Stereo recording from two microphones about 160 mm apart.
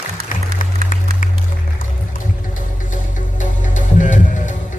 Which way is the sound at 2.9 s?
55° left (ahead or behind).